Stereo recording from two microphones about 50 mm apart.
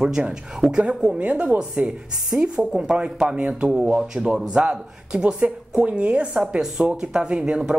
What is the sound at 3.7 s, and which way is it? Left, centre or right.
Speech, centre.